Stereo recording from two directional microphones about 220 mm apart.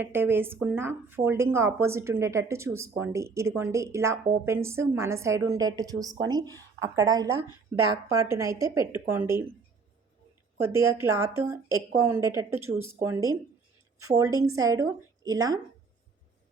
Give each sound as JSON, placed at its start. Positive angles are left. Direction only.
{"t": 0.0, "sound": "speech", "side_deg": -10}
{"t": 10.6, "sound": "speech", "side_deg": -10}